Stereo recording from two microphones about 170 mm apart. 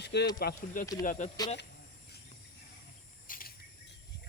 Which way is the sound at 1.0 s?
50° left (ahead or behind).